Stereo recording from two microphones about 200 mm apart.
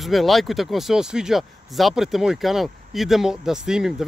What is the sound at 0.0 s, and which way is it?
Speech, centre (ahead or behind).